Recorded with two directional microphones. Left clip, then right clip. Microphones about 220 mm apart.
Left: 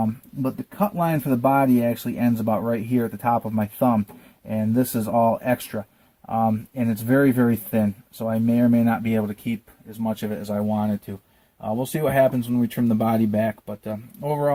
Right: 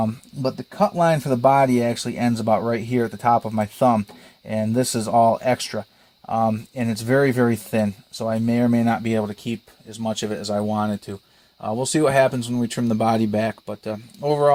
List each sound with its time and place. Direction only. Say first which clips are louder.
0.0 s speech: right 2 dB; 35° right (ahead or behind)